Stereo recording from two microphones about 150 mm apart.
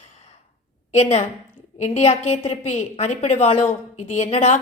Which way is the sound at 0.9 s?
45° left (ahead or behind).